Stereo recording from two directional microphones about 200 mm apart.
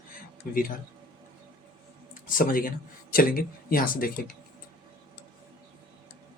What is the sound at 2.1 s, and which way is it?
Speech, 45° left (ahead or behind).